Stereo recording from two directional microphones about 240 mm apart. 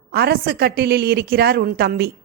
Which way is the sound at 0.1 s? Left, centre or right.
Right.